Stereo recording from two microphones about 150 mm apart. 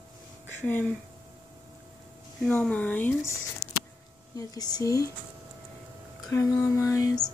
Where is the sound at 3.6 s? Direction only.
90° left.